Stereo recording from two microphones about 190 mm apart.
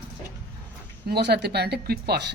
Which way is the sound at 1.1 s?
60° right (ahead or behind).